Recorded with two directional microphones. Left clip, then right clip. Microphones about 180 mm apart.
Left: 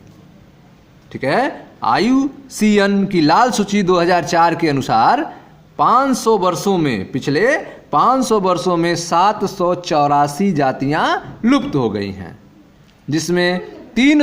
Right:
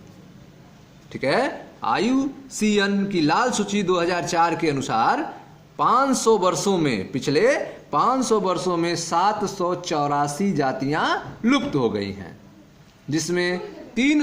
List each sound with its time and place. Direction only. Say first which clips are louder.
1.1 s a man's voice: left 5 dB; 30° left (ahead or behind); by 14.2 s 45° left (ahead or behind)